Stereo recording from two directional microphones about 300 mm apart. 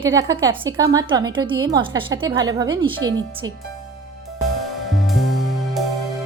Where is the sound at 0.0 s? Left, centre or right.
Centre.